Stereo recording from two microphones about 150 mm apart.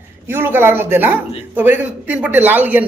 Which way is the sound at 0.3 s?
15° right (ahead or behind).